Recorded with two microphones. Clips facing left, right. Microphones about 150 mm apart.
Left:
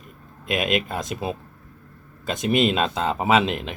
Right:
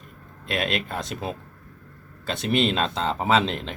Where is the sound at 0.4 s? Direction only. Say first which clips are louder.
Left 3 dB; 10° left (ahead or behind).